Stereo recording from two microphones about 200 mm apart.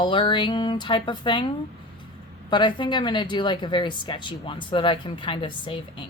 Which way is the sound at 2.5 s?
20° left (ahead or behind).